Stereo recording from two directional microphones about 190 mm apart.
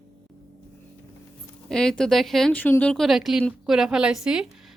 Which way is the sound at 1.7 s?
5° left (ahead or behind).